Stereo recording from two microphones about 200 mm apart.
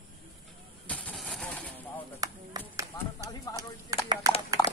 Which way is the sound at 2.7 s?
15° right (ahead or behind).